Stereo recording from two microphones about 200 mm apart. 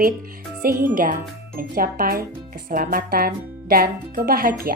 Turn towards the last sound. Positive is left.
turn(degrees=-45)  # may be behind; listen again after turning